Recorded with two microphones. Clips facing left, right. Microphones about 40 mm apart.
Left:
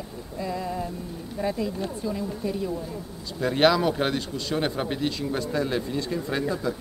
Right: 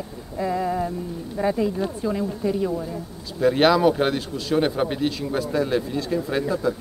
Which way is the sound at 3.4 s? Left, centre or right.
Centre.